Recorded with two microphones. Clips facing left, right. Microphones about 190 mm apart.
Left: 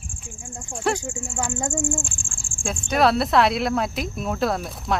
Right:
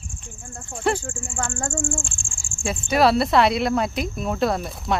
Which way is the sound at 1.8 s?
20° left (ahead or behind).